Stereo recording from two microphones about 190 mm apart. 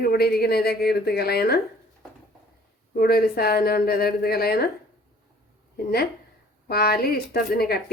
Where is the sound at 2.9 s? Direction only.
50° left (ahead or behind).